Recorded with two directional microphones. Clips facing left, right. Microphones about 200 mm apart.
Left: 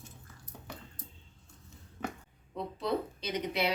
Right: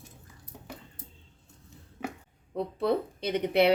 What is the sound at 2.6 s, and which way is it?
Speech, 60° right (ahead or behind).